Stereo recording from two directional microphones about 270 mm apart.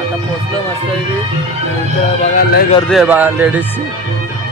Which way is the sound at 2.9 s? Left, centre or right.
Centre.